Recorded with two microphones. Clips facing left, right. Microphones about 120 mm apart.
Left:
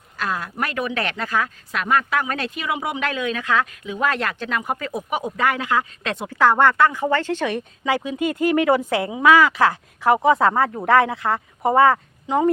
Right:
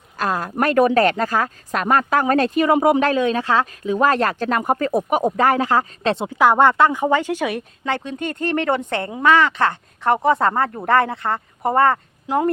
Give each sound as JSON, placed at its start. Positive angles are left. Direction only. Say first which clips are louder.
{"t": 0.2, "sound": "speech", "louder": "right 5 dB", "side_deg": -40}
{"t": 6.3, "sound": "speech", "louder": "right 1 dB", "side_deg": -15}
{"t": 7.9, "sound": "speech", "louder": "left 3 dB", "side_deg": 5}